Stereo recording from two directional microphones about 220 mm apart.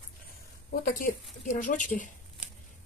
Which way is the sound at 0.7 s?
40° left (ahead or behind).